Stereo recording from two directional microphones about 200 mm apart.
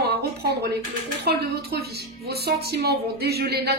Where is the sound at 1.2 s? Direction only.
50° right (ahead or behind).